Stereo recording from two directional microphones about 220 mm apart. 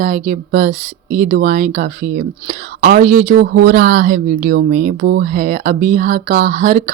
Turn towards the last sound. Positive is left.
turn(degrees=-35)  # may be behind; listen again after turning